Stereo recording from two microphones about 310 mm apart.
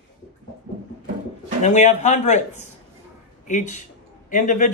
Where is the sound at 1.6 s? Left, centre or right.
Left.